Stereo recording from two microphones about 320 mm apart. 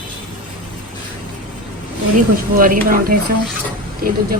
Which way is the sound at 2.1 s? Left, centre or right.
Right.